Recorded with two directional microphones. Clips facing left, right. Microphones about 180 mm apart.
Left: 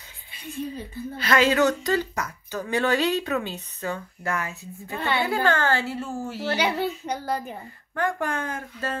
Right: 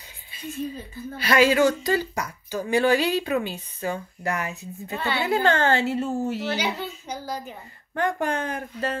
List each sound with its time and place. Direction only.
1.1 s speech: 10° right (ahead or behind)
6.5 s a child's voice: 60° left (ahead or behind)
7.9 s speech: 20° right (ahead or behind)